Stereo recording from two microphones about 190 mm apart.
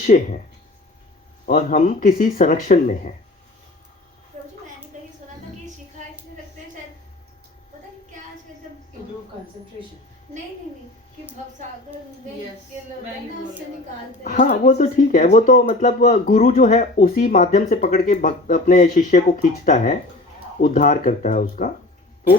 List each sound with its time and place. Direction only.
0.0 s speech: 40° left (ahead or behind)
1.5 s speech: 45° left (ahead or behind)
14.3 s speech: 50° left (ahead or behind)